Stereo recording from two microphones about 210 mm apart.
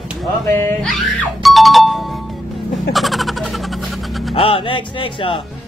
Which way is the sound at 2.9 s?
Centre (ahead or behind).